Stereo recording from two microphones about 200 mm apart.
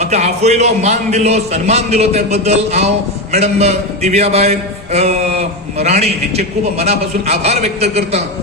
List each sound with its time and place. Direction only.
0.0 s a man's voice: 35° right (ahead or behind)